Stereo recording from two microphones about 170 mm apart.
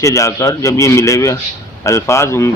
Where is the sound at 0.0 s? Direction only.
20° left (ahead or behind).